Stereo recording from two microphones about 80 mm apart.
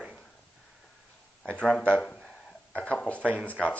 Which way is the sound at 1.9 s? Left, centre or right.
Centre.